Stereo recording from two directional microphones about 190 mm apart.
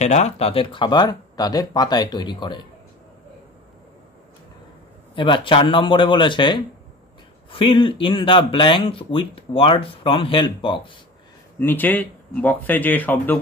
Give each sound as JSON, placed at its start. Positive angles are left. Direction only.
{"t": 0.0, "sound": "speech", "side_deg": 35}
{"t": 5.1, "sound": "speech", "side_deg": 25}
{"t": 11.6, "sound": "speech", "side_deg": 10}